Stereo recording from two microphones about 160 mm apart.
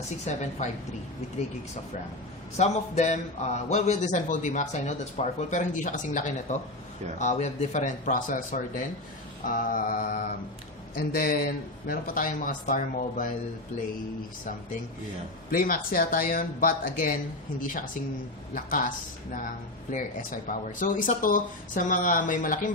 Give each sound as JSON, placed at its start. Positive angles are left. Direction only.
{"t": 0.3, "sound": "a man's voice", "side_deg": 45}
{"t": 2.6, "sound": "a man's voice", "side_deg": 45}
{"t": 15.5, "sound": "speech", "side_deg": 60}
{"t": 19.9, "sound": "speech", "side_deg": 55}